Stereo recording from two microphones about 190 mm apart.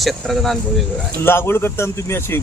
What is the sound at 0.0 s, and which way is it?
Speech, centre (ahead or behind).